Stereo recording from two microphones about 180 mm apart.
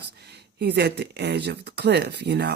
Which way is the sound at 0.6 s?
65° right (ahead or behind).